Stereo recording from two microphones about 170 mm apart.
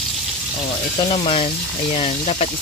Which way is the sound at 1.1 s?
35° left (ahead or behind).